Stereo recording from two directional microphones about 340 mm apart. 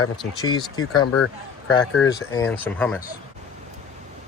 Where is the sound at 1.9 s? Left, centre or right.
Centre.